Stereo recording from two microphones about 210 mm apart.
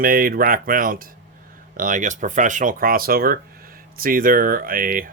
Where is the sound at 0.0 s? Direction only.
45° right (ahead or behind).